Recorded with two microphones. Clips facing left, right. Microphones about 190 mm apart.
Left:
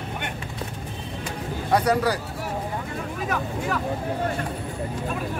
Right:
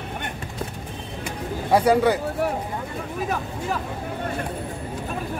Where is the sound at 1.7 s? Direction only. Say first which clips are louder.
Right 4 dB; 25° right (ahead or behind).